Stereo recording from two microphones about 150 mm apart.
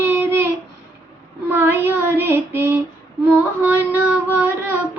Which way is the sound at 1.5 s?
15° right (ahead or behind).